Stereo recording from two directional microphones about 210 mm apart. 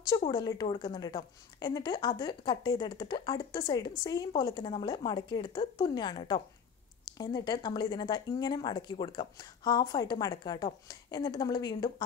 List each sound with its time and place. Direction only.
0.3 s speech: 20° left (ahead or behind)